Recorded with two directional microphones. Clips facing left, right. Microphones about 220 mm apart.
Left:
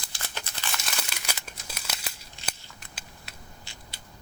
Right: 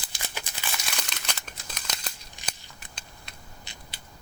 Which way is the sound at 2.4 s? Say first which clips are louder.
Left 2 dB; 15° right (ahead or behind).